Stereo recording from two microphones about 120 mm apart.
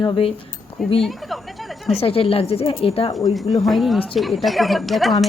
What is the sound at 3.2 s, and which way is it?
Speech, centre (ahead or behind).